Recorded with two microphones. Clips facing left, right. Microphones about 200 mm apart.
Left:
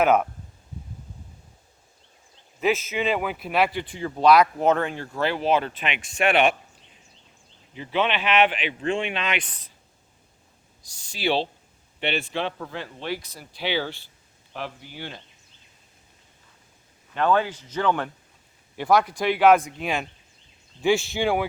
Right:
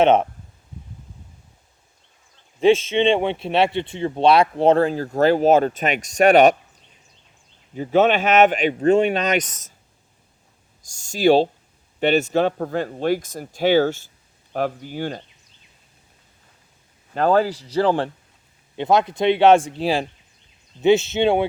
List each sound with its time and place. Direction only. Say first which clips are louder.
0.0 s speech: right 4 dB; 25° right (ahead or behind)
2.6 s speech: right 8 dB; 30° right (ahead or behind)
7.7 s speech: right 8 dB; 45° right (ahead or behind)
10.8 s speech: right 10 dB; 45° right (ahead or behind)
17.2 s speech: right 4 dB; 35° right (ahead or behind)
20.8 s speech: right 6 dB; 20° right (ahead or behind)